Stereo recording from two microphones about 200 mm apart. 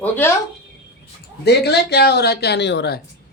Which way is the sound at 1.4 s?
55° left (ahead or behind).